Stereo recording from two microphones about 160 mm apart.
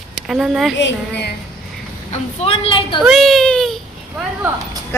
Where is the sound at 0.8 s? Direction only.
90° left.